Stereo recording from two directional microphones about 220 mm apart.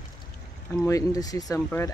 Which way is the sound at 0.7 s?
15° left (ahead or behind).